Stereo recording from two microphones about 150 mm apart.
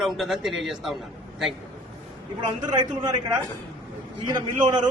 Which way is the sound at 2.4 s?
30° right (ahead or behind).